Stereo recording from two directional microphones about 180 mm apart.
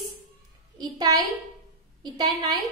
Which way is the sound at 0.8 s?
25° right (ahead or behind).